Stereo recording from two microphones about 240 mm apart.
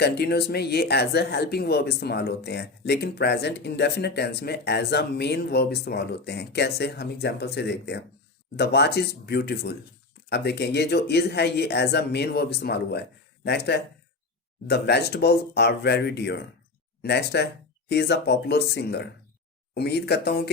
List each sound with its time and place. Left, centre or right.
0.0 s speech: left